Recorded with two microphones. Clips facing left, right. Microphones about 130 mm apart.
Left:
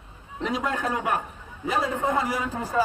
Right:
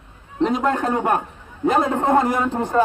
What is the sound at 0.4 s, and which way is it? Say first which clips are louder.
A man's voice: right 8 dB; 45° right (ahead or behind).